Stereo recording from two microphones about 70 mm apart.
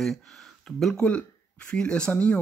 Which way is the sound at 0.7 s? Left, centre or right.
Centre.